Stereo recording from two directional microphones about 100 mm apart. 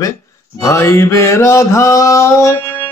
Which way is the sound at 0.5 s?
30° left (ahead or behind).